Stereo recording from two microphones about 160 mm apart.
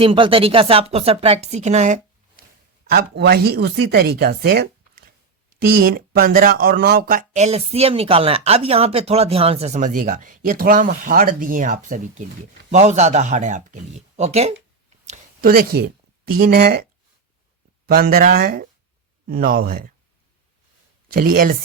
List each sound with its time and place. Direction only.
0.0 s speech: 35° right (ahead or behind)
2.9 s speech: 80° right; by 14.5 s 40° right (ahead or behind)
15.0 s a sound: 45° right (ahead or behind)
15.4 s speech: 70° right (ahead or behind)
21.1 s speech: 60° right (ahead or behind)